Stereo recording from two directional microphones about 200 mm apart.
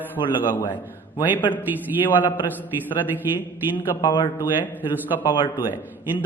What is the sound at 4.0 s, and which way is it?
Speech, 20° left (ahead or behind).